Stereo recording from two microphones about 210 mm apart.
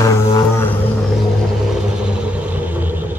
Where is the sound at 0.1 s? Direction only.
10° left (ahead or behind).